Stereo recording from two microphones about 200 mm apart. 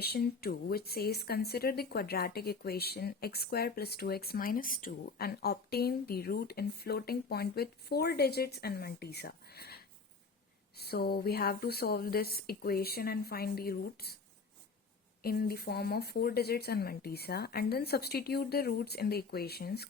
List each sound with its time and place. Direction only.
0.0 s speech: 50° left (ahead or behind)
15.2 s speech: 50° left (ahead or behind)